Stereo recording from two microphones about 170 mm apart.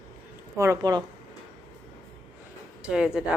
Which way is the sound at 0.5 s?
15° right (ahead or behind).